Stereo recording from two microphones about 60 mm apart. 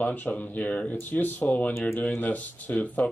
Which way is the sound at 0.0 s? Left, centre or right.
Left.